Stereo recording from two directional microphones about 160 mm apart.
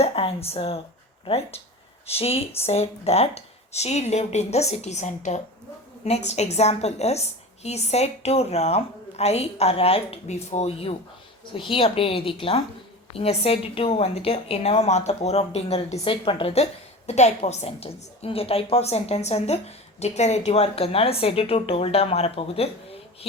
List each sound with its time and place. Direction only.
0.0 s a woman's voice: 40° left (ahead or behind)